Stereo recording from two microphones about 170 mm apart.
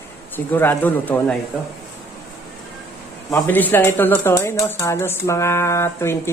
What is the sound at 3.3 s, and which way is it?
A woman's voice, 10° left (ahead or behind).